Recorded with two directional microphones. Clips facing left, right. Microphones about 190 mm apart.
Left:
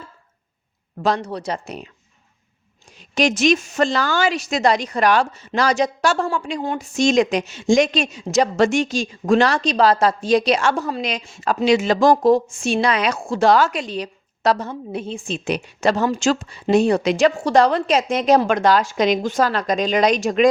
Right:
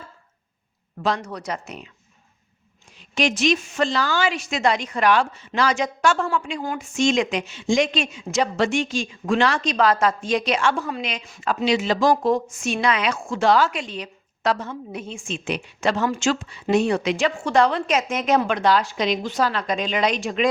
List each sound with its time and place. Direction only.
1.0 s a woman's voice: 35° left (ahead or behind)
3.0 s a woman's voice: 40° left (ahead or behind)
12.3 s a woman's voice: 30° left (ahead or behind)